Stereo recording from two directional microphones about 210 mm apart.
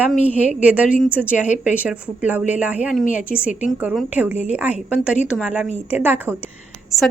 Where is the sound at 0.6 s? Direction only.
5° right (ahead or behind).